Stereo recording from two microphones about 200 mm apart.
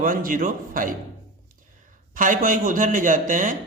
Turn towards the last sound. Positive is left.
turn(degrees=-40)  # may be behind; listen again after turning